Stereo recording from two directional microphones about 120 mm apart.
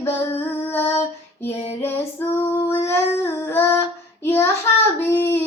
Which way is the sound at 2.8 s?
20° left (ahead or behind).